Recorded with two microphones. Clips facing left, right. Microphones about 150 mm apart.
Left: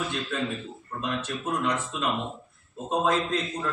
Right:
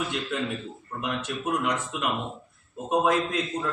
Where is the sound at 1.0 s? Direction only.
15° right (ahead or behind).